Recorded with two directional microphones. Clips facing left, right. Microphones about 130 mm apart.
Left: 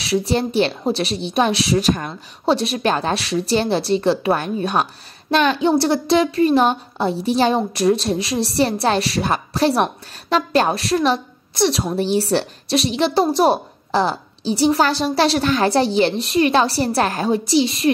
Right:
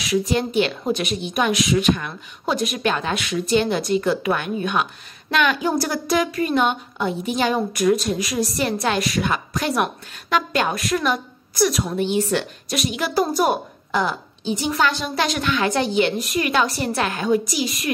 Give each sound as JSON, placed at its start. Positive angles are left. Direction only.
{"t": 0.0, "sound": "a woman's voice", "side_deg": 30}